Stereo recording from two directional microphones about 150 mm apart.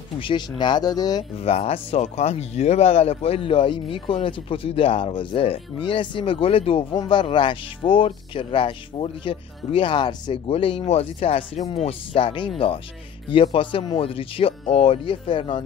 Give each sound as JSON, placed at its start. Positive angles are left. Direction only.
{"t": 0.2, "sound": "speech", "side_deg": 30}
{"t": 1.4, "sound": "speech", "side_deg": 40}